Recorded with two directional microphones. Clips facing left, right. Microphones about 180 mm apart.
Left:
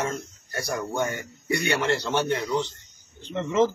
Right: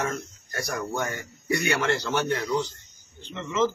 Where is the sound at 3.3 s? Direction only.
40° left (ahead or behind).